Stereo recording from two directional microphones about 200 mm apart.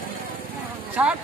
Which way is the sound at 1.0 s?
5° right (ahead or behind).